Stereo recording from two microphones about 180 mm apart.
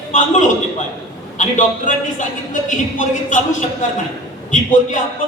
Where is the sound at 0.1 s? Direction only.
45° left (ahead or behind).